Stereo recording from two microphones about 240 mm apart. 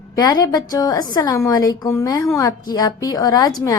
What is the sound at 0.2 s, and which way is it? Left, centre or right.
A woman's voice, centre.